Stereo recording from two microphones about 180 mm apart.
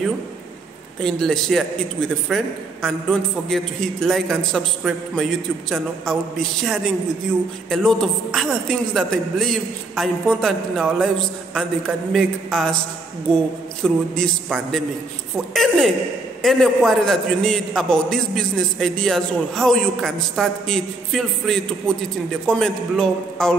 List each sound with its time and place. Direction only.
1.0 s a man's voice: 5° left (ahead or behind)
13.8 s a man's voice: 5° left (ahead or behind)